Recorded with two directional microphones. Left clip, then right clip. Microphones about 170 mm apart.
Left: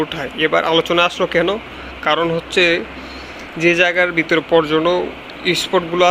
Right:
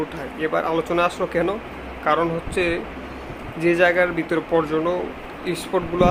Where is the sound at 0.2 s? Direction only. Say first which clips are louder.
Left 7 dB; 20° left (ahead or behind).